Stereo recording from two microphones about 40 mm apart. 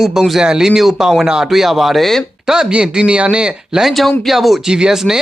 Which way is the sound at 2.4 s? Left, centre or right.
Centre.